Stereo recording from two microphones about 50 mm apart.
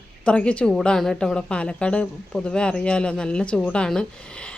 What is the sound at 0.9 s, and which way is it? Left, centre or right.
Speech, centre.